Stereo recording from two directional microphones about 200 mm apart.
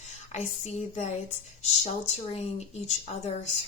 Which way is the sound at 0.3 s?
35° left (ahead or behind).